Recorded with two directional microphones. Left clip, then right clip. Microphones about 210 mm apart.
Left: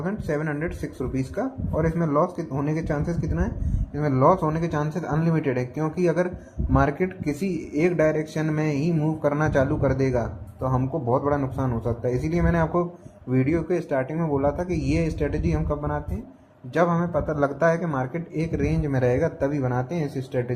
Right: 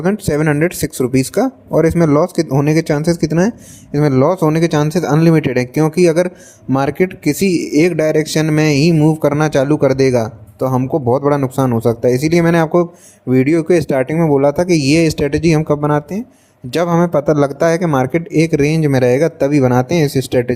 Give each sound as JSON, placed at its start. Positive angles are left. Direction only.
{"t": 0.0, "sound": "speech", "side_deg": -60}